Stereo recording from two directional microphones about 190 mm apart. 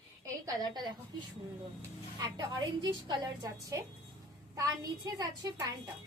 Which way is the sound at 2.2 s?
20° right (ahead or behind).